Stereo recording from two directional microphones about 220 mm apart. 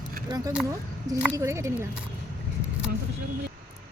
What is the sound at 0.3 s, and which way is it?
Speech, 20° right (ahead or behind).